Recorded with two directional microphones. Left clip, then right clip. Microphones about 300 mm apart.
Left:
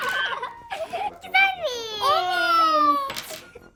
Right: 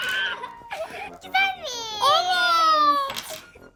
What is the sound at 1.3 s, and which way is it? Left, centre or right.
Baby cry, centre.